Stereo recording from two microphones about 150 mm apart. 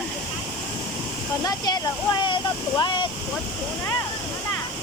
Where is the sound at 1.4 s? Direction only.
25° left (ahead or behind).